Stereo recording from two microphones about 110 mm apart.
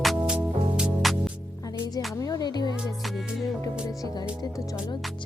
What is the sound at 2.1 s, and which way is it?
Music, 35° left (ahead or behind).